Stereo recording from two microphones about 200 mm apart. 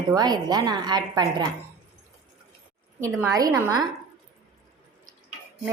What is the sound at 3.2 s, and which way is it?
Speech, 15° right (ahead or behind).